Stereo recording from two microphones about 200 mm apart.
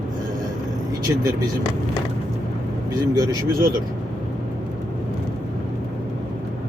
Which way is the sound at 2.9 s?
15° right (ahead or behind).